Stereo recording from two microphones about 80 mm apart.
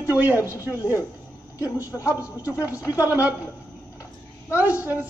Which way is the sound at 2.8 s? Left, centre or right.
Left.